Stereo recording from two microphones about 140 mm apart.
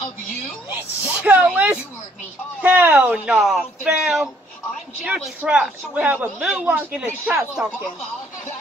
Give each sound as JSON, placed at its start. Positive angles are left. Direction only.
{"t": 0.7, "sound": "speech", "side_deg": -10}